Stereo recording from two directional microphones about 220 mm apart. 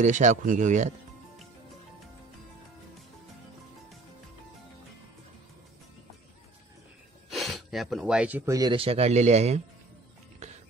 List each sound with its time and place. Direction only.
0.0 s speech: 35° right (ahead or behind)
7.2 s speech: centre (ahead or behind); by 9.6 s 30° right (ahead or behind)